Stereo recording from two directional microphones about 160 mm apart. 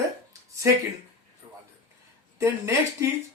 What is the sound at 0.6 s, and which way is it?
Speech, 15° right (ahead or behind).